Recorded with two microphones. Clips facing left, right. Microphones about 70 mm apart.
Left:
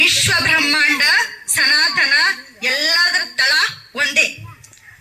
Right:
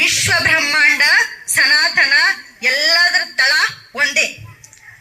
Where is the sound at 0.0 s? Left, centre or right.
Centre.